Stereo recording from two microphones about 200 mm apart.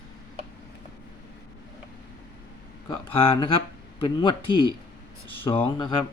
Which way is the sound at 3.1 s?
25° left (ahead or behind).